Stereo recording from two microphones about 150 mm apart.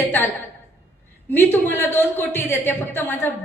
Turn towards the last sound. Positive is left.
turn(degrees=15)  # may be behind; listen again after turning